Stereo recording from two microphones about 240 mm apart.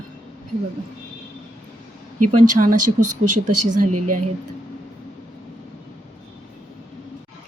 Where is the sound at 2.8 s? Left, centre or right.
Right.